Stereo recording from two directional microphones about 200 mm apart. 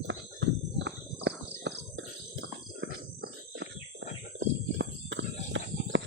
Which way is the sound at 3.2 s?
60° right (ahead or behind).